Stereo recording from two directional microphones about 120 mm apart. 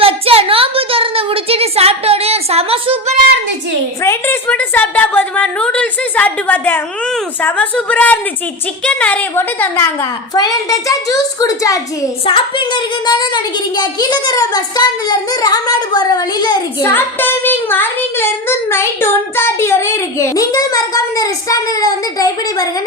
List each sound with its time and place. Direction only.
0.0 s a sound: 50° right (ahead or behind)
4.0 s a woman's voice: 25° left (ahead or behind)
4.4 s a sound: 15° left (ahead or behind)
7.4 s a woman's voice: 15° left (ahead or behind)
10.3 s child singing: 30° left (ahead or behind)
12.2 s a woman's voice: 45° left (ahead or behind)
16.8 s child singing: 20° left (ahead or behind)